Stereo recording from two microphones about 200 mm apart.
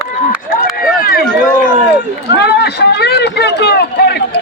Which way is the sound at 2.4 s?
55° left (ahead or behind).